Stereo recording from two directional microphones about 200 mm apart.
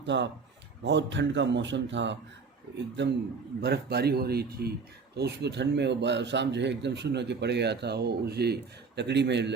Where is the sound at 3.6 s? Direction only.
55° right (ahead or behind).